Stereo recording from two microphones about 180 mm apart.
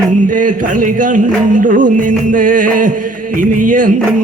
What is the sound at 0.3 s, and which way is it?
Music, 45° right (ahead or behind).